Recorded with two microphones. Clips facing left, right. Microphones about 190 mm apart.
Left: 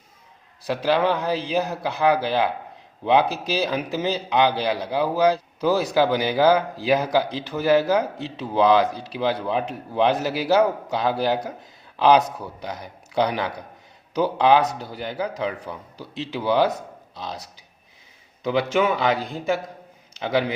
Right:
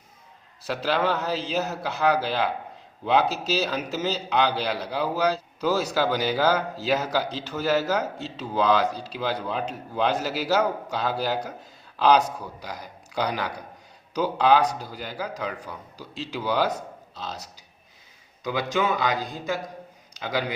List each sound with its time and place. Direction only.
0.7 s a man's voice: 15° left (ahead or behind)
18.4 s a man's voice: 25° left (ahead or behind)